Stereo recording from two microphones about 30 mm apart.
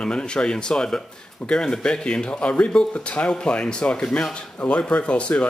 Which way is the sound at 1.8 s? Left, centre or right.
Left.